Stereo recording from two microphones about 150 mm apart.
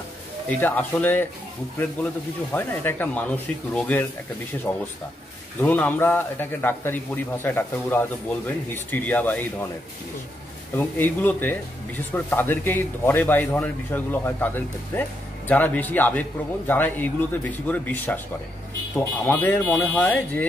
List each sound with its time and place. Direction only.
0.5 s a man's voice: 10° left (ahead or behind)
2.5 s a man's voice: 15° left (ahead or behind)
4.7 s speech: 20° left (ahead or behind)
5.6 s a man's voice: 10° left (ahead or behind)
10.8 s a man's voice: 10° left (ahead or behind)